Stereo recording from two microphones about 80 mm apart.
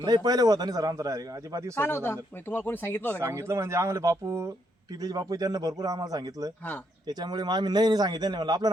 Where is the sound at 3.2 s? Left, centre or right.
Right.